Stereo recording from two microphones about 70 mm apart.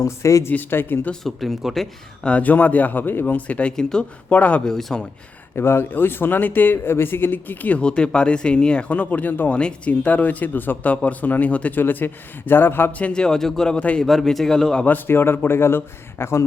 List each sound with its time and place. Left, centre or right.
0.0 s speech: left
0.7 s a man's voice: left
1.2 s speech: centre
2.2 s speech: left
4.3 s speech: left
4.6 s speech: centre
5.5 s speech: left
13.0 s speech: centre
14.0 s speech: centre
14.8 s a man's voice: left